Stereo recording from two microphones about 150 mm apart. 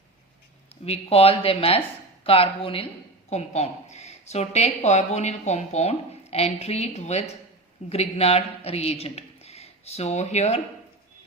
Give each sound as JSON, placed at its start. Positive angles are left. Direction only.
{"t": 0.9, "sound": "a man's voice", "side_deg": 40}